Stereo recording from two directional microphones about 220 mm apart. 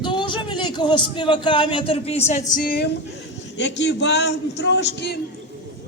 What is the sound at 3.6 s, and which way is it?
A man's voice, 55° left (ahead or behind).